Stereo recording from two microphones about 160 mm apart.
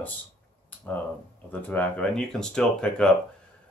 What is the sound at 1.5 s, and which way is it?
Speech, 10° left (ahead or behind).